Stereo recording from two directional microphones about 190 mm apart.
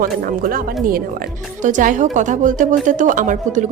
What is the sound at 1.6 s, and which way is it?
A woman's voice, 40° right (ahead or behind).